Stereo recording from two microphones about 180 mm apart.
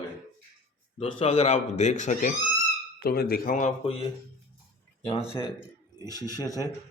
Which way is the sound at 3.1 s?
55° left (ahead or behind).